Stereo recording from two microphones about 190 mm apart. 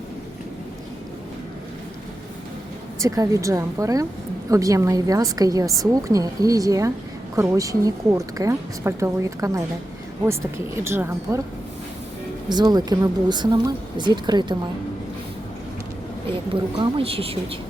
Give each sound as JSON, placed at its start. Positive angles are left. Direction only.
{"t": 3.0, "sound": "a woman's voice", "side_deg": -15}
{"t": 10.8, "sound": "a woman's voice", "side_deg": -15}
{"t": 12.5, "sound": "speech", "side_deg": -20}
{"t": 16.7, "sound": "speech", "side_deg": -25}